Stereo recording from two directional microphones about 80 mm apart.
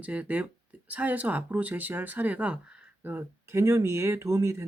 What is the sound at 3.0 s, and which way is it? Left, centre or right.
Speech, right.